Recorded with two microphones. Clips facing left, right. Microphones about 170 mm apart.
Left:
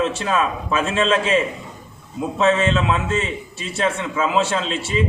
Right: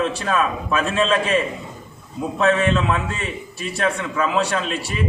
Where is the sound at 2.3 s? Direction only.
20° left (ahead or behind).